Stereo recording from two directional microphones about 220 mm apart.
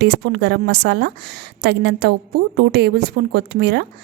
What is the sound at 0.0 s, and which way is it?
A woman's voice, 50° right (ahead or behind).